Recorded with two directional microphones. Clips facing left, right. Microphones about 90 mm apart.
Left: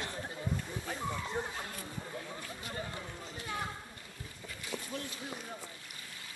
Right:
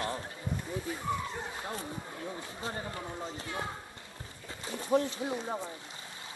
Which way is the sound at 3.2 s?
25° right (ahead or behind).